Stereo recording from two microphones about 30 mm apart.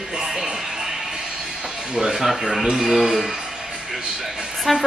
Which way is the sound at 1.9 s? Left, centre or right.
Right.